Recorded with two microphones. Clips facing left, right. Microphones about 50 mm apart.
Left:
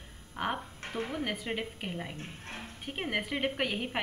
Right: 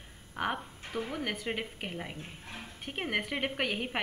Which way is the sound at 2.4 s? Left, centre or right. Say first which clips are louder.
Left 3 dB; left.